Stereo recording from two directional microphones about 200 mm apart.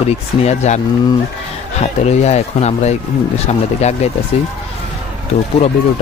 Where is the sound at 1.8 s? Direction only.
35° left (ahead or behind).